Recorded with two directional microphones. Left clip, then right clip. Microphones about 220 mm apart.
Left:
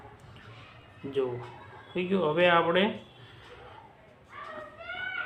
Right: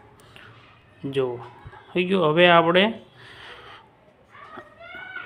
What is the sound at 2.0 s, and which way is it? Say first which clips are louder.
Speech: right 7 dB; 45° right (ahead or behind).